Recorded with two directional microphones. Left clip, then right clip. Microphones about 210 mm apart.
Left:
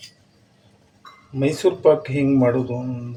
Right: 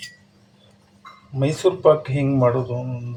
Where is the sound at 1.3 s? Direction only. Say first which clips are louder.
Left 1 dB; 15° left (ahead or behind).